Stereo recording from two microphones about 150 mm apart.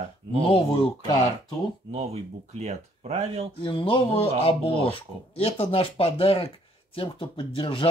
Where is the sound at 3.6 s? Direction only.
35° left (ahead or behind).